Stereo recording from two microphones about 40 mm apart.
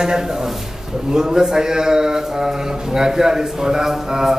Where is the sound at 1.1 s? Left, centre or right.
Centre.